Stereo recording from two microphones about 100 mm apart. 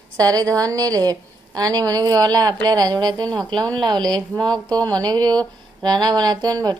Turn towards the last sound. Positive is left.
turn(degrees=-40)  # may be behind; listen again after turning